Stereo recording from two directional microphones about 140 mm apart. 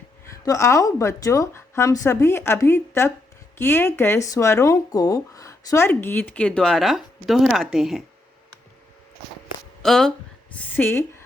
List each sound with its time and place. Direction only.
0.3 s a woman's voice: 20° left (ahead or behind); by 8.0 s centre (ahead or behind)
9.8 s speech: centre (ahead or behind)
10.8 s speech: 15° left (ahead or behind)